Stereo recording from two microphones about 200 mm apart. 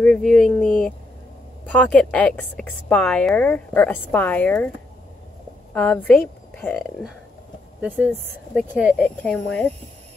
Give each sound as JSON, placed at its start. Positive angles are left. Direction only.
{"t": 0.0, "sound": "a sound", "side_deg": 0}
{"t": 1.7, "sound": "a woman's voice", "side_deg": 5}
{"t": 5.8, "sound": "a woman's voice", "side_deg": 5}
{"t": 7.8, "sound": "speech", "side_deg": -5}
{"t": 8.9, "sound": "speech", "side_deg": 5}